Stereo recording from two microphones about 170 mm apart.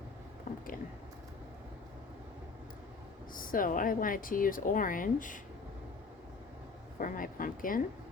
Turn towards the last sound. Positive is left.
turn(degrees=55)  # may be behind; listen again after turning